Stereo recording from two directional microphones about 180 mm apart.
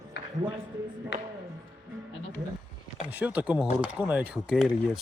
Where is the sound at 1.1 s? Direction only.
90° left.